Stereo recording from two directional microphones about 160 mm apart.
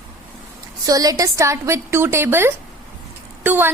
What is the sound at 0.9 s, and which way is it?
A woman's voice, 20° right (ahead or behind).